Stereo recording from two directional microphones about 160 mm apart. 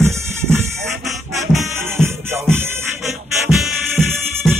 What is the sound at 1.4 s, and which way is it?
Music, 15° right (ahead or behind).